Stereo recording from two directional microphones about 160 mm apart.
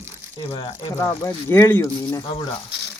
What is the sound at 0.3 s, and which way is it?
Speech, 30° left (ahead or behind).